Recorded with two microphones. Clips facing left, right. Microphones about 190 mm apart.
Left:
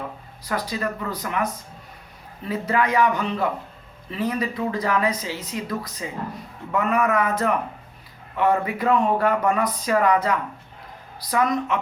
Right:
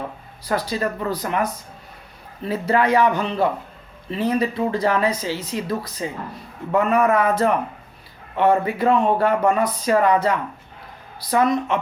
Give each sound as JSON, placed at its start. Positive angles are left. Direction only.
{"t": 0.4, "sound": "speech", "side_deg": -30}